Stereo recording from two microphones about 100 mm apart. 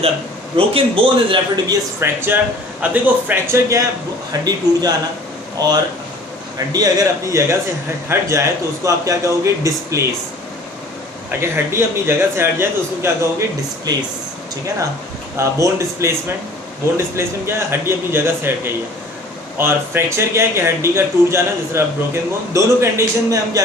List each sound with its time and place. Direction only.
0.5 s speech: 65° right (ahead or behind)
2.0 s speech: 20° right (ahead or behind)
4.3 s a man's voice: 40° right (ahead or behind)
11.3 s speech: 25° right (ahead or behind)
15.4 s speech: 30° right (ahead or behind)
17.2 s speech: 25° right (ahead or behind)